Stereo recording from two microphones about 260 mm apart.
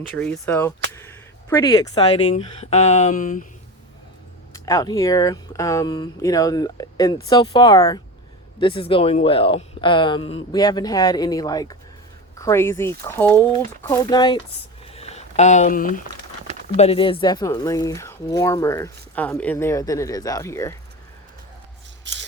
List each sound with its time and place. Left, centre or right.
0.0 s speech: centre; by 3.4 s left
4.5 s speech: centre
22.0 s rub: right